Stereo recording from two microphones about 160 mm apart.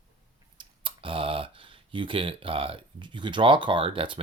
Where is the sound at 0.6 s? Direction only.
35° right (ahead or behind).